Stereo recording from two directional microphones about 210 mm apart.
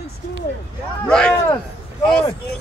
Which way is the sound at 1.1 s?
5° left (ahead or behind).